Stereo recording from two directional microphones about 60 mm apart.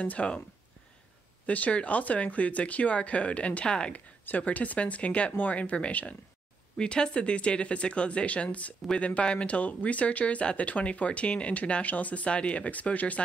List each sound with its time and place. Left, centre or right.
0.0 s speech: left
1.4 s speech: left